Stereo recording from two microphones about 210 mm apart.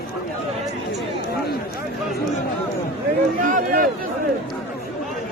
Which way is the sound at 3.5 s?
40° right (ahead or behind).